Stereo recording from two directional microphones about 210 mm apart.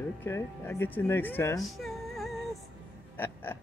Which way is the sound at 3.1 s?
10° left (ahead or behind).